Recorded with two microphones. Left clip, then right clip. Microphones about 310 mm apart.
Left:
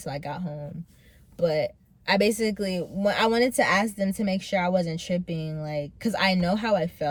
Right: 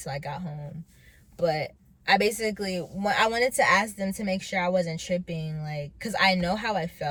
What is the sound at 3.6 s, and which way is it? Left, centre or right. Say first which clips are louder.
Speech: right 3 dB; right.